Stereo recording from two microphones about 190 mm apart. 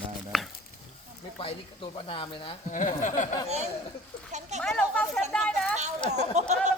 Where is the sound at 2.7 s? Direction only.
40° left (ahead or behind).